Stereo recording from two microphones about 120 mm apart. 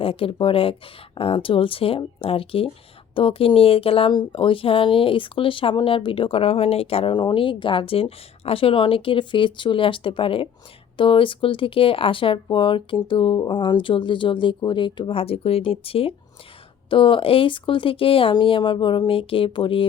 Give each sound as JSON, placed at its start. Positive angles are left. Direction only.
{"t": 0.0, "sound": "speech", "side_deg": 50}